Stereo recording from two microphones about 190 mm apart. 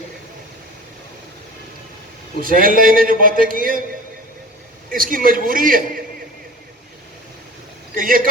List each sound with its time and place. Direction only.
2.4 s a man's voice: 50° right (ahead or behind)
4.9 s a man's voice: 45° right (ahead or behind)
7.9 s a man's voice: 50° right (ahead or behind)